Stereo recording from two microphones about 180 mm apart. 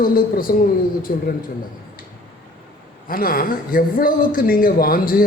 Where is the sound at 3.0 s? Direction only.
55° left (ahead or behind).